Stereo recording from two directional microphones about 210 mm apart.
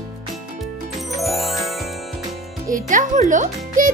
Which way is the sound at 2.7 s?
40° right (ahead or behind).